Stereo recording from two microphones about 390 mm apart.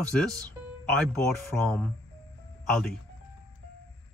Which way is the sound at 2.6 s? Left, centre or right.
Centre.